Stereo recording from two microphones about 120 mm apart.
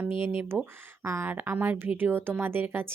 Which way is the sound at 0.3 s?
20° right (ahead or behind).